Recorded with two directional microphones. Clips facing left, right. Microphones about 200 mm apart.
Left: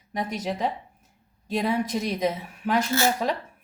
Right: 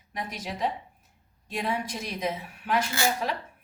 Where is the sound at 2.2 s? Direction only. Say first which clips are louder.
Left 5 dB; 40° left (ahead or behind).